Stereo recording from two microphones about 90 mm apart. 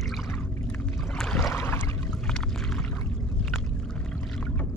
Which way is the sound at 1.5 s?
30° left (ahead or behind).